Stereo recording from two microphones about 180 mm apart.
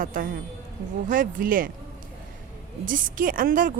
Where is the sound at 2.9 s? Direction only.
50° right (ahead or behind).